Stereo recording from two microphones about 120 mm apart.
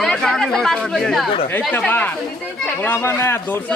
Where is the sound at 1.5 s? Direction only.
15° left (ahead or behind).